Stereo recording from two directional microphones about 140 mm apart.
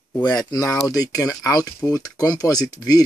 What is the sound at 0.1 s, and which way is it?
Speech, 25° left (ahead or behind).